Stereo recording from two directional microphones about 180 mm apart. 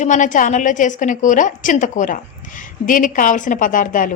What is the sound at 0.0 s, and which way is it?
A woman's voice, 45° left (ahead or behind).